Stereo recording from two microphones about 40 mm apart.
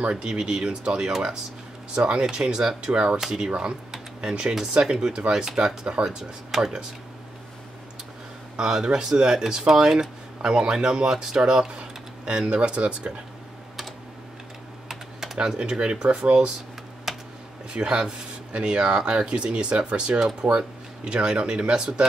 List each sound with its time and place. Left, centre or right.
0.1 s speech: centre
2.2 s speech: centre
3.2 s speech: centre
3.4 s speech: right
5.6 s speech: right
6.0 s speech: centre
8.5 s speech: centre
14.9 s typing: centre
15.3 s speech: right
17.1 s typing: centre
17.7 s speech: right